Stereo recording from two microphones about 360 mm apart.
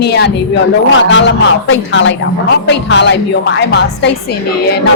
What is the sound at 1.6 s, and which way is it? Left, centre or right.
A woman's voice, left.